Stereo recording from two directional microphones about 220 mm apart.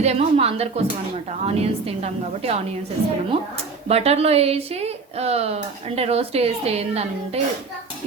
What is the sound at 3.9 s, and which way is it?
A woman's voice, 30° right (ahead or behind).